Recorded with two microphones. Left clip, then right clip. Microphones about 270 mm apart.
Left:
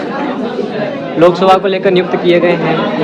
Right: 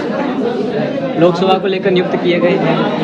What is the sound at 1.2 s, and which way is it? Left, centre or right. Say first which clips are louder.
A man's voice: left 5 dB; left.